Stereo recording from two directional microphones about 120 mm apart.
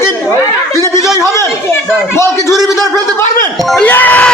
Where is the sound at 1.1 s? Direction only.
25° left (ahead or behind).